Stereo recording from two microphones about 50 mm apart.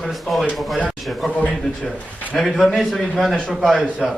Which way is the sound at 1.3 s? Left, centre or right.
Left.